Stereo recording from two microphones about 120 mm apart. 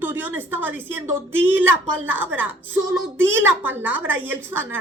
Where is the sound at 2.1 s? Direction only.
15° right (ahead or behind).